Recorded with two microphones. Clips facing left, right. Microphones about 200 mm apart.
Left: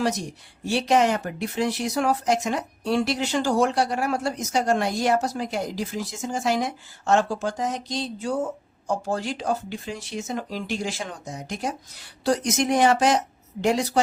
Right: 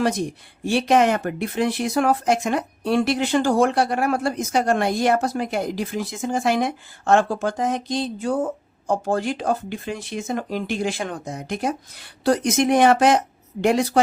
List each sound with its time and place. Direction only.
0.0 s speech: 55° right (ahead or behind)